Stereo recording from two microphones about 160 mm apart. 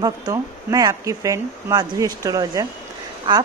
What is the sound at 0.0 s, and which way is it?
A woman's voice, 20° right (ahead or behind).